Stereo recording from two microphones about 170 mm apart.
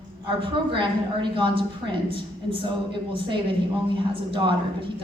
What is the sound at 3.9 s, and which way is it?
Speech, 30° right (ahead or behind).